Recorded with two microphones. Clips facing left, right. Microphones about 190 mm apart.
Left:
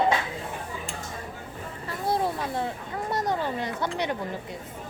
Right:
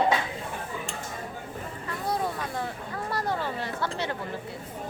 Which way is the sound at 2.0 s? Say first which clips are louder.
Left 3 dB; 25° left (ahead or behind).